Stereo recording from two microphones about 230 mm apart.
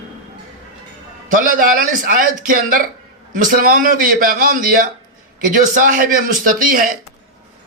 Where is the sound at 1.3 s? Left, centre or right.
Right.